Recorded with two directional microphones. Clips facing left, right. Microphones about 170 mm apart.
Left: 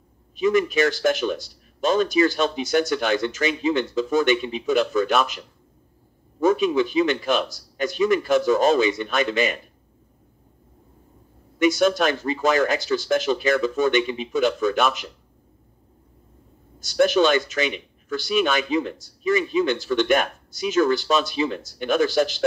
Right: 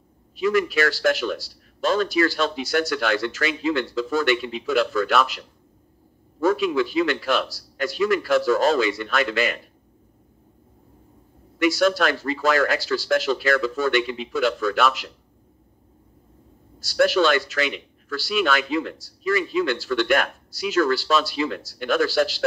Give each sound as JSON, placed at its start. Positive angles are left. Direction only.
{"t": 0.4, "sound": "speech", "side_deg": 20}
{"t": 6.4, "sound": "speech", "side_deg": 20}
{"t": 11.5, "sound": "speech", "side_deg": 20}
{"t": 16.8, "sound": "speech", "side_deg": 20}